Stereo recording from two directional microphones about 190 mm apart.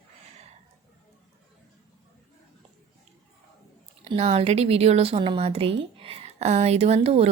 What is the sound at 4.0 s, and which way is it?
A woman's voice, 30° right (ahead or behind).